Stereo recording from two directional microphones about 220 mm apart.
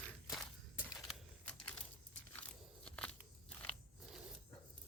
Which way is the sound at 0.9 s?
Centre (ahead or behind).